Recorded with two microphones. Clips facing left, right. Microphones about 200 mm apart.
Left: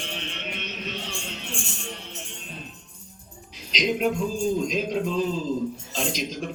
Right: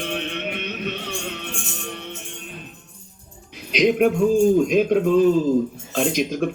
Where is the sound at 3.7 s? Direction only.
60° right (ahead or behind).